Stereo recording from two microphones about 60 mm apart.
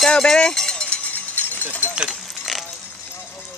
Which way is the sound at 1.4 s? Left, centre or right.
Left.